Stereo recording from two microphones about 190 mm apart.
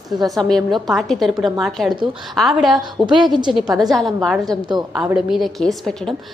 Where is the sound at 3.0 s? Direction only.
25° right (ahead or behind).